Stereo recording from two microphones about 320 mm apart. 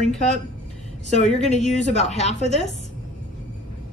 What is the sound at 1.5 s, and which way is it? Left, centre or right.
A woman's voice, left.